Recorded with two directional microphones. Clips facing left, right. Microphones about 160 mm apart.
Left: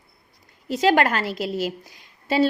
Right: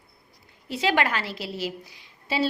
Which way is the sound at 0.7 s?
45° left (ahead or behind).